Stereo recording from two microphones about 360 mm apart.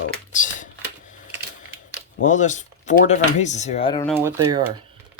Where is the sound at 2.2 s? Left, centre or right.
Left.